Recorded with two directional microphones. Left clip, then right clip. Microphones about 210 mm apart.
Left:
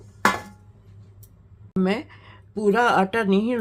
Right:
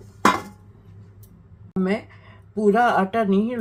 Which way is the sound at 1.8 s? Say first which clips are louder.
Even; 50° left (ahead or behind).